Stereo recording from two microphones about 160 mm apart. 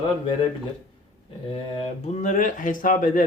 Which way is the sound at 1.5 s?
40° left (ahead or behind).